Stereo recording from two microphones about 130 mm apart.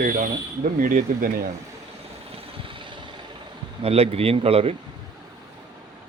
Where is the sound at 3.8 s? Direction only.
50° right (ahead or behind).